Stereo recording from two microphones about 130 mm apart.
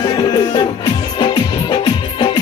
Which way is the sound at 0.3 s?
35° left (ahead or behind).